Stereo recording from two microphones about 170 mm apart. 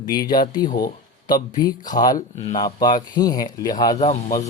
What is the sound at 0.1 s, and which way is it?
Speech, 25° left (ahead or behind).